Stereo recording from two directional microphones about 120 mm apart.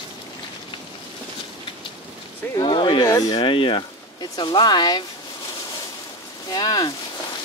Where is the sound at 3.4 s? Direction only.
45° left (ahead or behind).